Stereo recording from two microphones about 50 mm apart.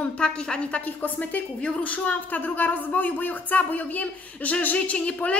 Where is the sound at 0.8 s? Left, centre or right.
Left.